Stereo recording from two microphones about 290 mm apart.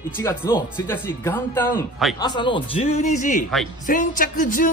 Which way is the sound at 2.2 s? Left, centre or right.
Centre.